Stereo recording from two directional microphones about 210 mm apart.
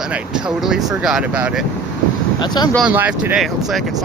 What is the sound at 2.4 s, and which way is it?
Speech, 20° left (ahead or behind).